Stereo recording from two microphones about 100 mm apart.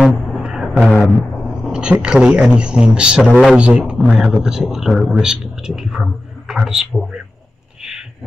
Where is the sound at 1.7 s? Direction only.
10° right (ahead or behind).